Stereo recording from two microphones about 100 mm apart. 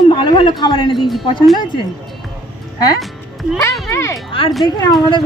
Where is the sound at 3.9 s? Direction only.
30° left (ahead or behind).